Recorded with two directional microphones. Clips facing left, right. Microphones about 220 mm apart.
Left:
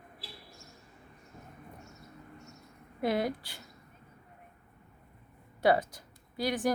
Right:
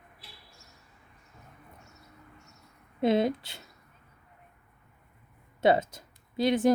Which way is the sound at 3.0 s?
25° right (ahead or behind).